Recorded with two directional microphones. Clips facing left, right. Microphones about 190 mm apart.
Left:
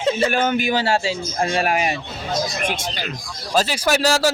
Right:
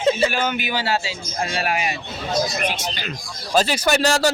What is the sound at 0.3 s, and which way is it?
A man's voice, 50° left (ahead or behind).